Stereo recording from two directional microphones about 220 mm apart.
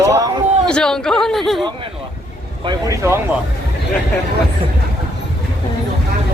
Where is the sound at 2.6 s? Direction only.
15° right (ahead or behind).